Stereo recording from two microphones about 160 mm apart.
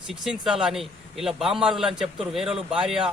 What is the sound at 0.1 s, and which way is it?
A man's voice, centre (ahead or behind).